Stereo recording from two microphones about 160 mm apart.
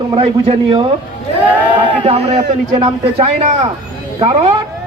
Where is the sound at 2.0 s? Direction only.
40° right (ahead or behind).